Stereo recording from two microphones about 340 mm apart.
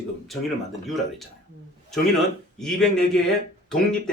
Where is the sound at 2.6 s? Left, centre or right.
Centre.